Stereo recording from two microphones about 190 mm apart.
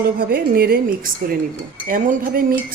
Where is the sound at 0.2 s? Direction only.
50° right (ahead or behind).